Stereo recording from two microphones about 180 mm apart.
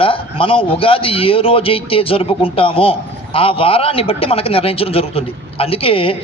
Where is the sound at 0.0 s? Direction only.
30° left (ahead or behind).